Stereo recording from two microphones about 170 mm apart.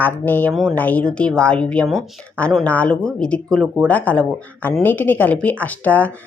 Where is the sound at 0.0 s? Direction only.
10° left (ahead or behind).